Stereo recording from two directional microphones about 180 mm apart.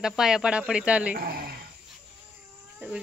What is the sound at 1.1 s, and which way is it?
Speech, 55° right (ahead or behind).